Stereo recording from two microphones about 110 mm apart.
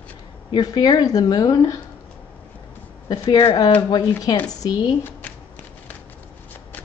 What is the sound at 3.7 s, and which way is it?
Speech, 35° left (ahead or behind).